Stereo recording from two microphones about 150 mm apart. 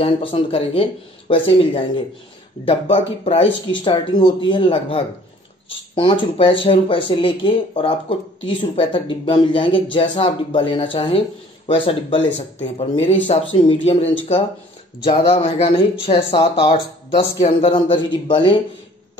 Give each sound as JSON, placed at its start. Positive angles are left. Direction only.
{"t": 0.0, "sound": "speech", "side_deg": 35}